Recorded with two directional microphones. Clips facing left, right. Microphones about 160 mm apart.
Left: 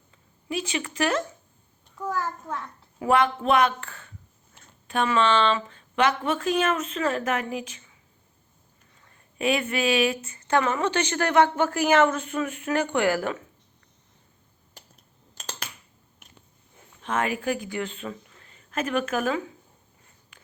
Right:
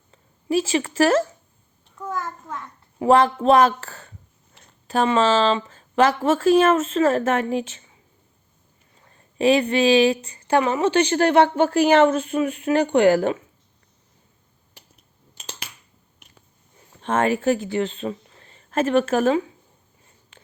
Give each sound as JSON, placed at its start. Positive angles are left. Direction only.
{"t": 0.1, "sound": "speech", "side_deg": -35}
{"t": 3.0, "sound": "speech", "side_deg": -35}
{"t": 9.0, "sound": "speech", "side_deg": -30}
{"t": 10.5, "sound": "a woman's voice", "side_deg": -15}
{"t": 15.4, "sound": "finger snapping", "side_deg": -10}
{"t": 16.9, "sound": "speech", "side_deg": -35}